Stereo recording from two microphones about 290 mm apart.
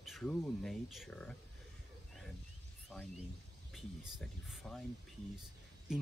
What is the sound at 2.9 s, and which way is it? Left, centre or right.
Speech, centre.